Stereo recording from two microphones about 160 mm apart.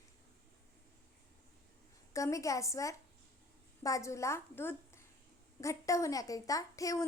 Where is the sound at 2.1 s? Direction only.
20° left (ahead or behind).